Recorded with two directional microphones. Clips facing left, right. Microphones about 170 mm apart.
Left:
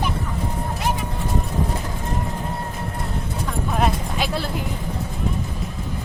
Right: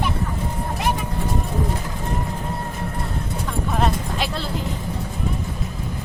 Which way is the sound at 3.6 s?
Centre (ahead or behind).